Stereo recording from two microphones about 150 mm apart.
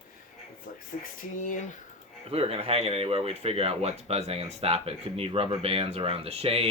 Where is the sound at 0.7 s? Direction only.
65° left (ahead or behind).